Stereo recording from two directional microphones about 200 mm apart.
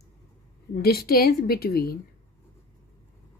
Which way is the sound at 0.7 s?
50° left (ahead or behind).